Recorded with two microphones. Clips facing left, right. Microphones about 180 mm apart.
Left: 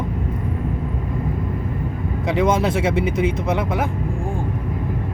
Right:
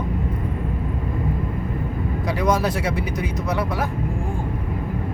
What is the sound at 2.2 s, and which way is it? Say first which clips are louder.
Speech: left 3 dB; 25° left (ahead or behind).